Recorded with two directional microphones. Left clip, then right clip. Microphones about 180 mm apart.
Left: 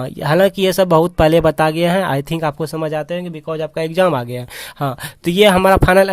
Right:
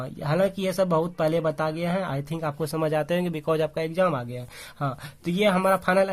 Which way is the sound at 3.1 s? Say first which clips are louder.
Left 2 dB; 10° left (ahead or behind).